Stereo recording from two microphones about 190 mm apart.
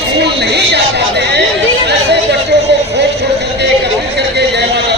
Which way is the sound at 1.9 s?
60° right (ahead or behind).